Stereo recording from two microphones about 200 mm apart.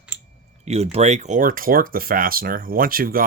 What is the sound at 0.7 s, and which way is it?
Speech, 35° right (ahead or behind).